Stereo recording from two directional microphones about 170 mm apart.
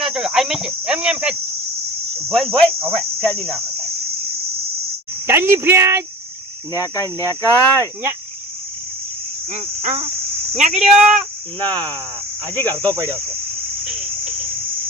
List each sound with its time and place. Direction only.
0.0 s speech: 5° right (ahead or behind)
3.2 s cricket: 10° left (ahead or behind)
5.2 s speech: 15° right (ahead or behind)
6.7 s cricket: 20° left (ahead or behind)
9.5 s cricket: 40° right (ahead or behind)
10.8 s speech: 5° right (ahead or behind)
11.6 s cricket: 10° left (ahead or behind)